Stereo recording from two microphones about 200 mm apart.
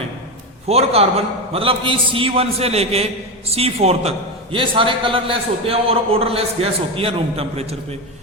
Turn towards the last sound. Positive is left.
turn(degrees=-30)  # may be behind; listen again after turning